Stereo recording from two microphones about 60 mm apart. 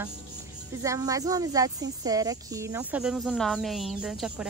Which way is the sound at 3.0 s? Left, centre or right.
Centre.